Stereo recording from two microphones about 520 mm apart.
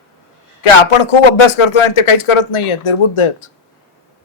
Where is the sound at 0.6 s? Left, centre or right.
Left.